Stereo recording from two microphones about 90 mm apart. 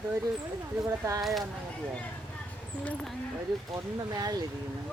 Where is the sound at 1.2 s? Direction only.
Centre (ahead or behind).